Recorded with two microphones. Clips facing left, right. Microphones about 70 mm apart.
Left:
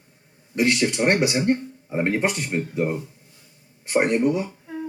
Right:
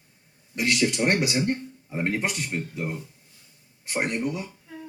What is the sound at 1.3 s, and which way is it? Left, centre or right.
Speech, centre.